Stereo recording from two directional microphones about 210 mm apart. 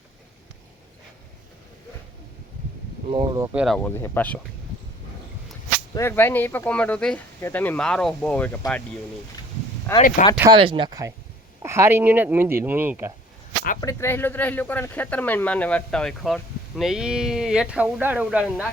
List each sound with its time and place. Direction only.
3.1 s speech: 20° right (ahead or behind)
3.5 s speech: 5° right (ahead or behind)
3.8 s speech: 10° left (ahead or behind)
5.9 s speech: 10° left (ahead or behind)
9.9 s speech: 10° left (ahead or behind)
10.6 s speech: 25° right (ahead or behind)
13.8 s speech: 10° left (ahead or behind); by 18.7 s 5° right (ahead or behind)